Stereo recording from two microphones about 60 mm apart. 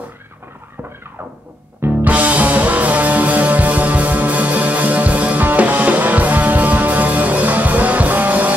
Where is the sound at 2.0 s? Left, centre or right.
Right.